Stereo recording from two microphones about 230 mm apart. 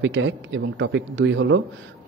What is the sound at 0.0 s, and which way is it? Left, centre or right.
Speech, right.